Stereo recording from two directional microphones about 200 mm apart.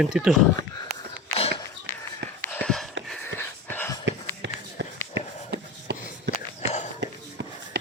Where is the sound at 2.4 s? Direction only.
10° left (ahead or behind).